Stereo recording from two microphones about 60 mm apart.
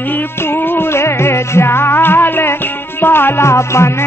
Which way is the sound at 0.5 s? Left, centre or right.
Left.